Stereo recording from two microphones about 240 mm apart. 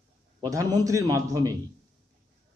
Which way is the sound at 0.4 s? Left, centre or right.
Centre.